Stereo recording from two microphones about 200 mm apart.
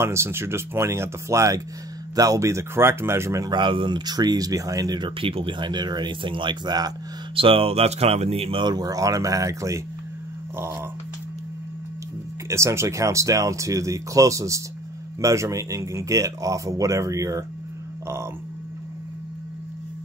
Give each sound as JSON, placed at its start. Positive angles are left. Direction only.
{"t": 0.0, "sound": "speech", "side_deg": -15}
{"t": 12.4, "sound": "speech", "side_deg": -15}